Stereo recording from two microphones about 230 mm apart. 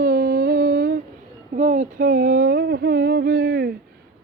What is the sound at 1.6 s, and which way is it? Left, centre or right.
Humming, right.